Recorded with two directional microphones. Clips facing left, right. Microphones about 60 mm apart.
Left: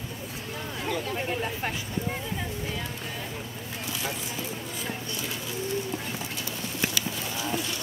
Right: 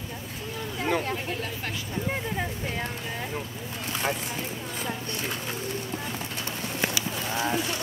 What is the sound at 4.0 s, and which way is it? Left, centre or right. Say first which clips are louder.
Vehicle: right 6 dB; right.